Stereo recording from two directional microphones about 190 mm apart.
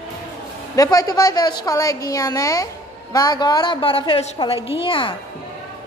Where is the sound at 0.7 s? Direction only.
20° left (ahead or behind).